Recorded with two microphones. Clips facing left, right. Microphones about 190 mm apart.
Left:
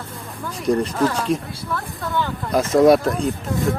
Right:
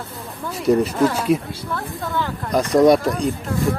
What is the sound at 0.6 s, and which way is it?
Speech, 5° right (ahead or behind).